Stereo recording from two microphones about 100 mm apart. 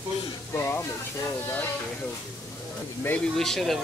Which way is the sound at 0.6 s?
25° left (ahead or behind).